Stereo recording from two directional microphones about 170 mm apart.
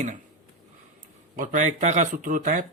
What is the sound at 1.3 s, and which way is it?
Speech, 50° right (ahead or behind).